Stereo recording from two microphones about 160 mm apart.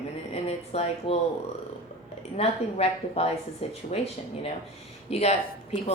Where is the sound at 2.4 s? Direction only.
40° left (ahead or behind).